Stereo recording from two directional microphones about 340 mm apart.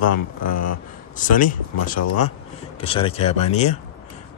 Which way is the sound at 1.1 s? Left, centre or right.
Left.